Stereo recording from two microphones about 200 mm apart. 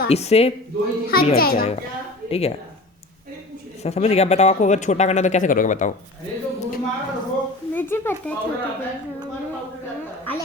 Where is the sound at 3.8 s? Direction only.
30° left (ahead or behind).